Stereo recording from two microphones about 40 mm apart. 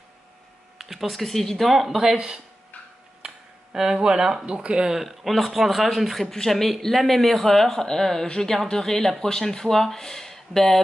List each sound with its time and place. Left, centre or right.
0.7 s speech: centre
1.7 s speech: centre
3.2 s a sound: centre
4.5 s speech: right
4.9 s a man's voice: centre